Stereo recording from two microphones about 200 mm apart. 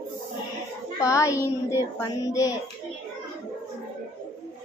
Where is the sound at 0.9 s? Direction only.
15° left (ahead or behind).